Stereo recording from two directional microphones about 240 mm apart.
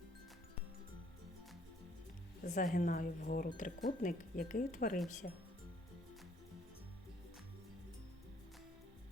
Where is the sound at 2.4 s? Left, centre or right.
Left.